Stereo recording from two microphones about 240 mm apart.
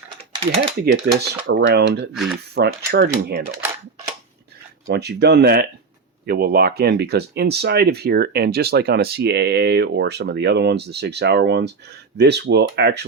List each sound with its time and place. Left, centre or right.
0.3 s speech: right
0.8 s speech: right
2.1 s speech: centre
2.6 s speech: right
4.9 s speech: right